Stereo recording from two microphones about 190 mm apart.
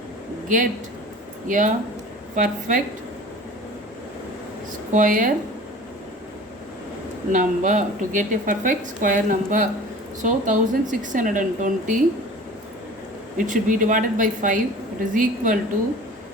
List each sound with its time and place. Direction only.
0.4 s a woman's voice: 45° right (ahead or behind)
4.9 s a woman's voice: 45° right (ahead or behind)
7.3 s a woman's voice: 40° right (ahead or behind)
13.3 s a woman's voice: 45° right (ahead or behind)